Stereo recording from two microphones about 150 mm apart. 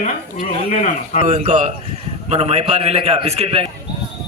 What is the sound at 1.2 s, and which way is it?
A man's voice, 50° right (ahead or behind).